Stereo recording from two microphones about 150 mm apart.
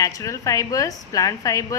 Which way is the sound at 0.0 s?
20° left (ahead or behind).